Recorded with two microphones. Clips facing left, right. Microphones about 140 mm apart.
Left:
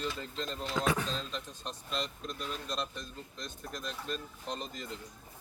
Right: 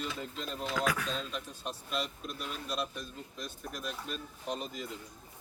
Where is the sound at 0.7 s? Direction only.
25° left (ahead or behind).